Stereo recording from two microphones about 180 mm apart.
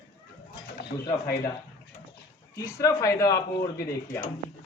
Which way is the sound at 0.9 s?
25° left (ahead or behind).